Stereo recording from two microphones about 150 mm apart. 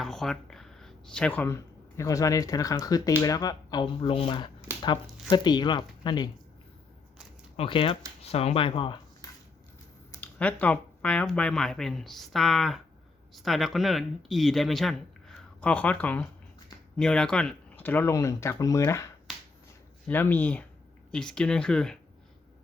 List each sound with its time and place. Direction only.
0.0 s speech: 5° left (ahead or behind)
2.0 s speech: 20° left (ahead or behind)
7.5 s speech: 40° left (ahead or behind)
10.2 s speech: 10° left (ahead or behind)
20.1 s speech: 15° left (ahead or behind)